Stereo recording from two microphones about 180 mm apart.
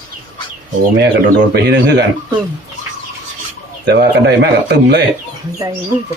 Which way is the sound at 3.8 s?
70° right (ahead or behind).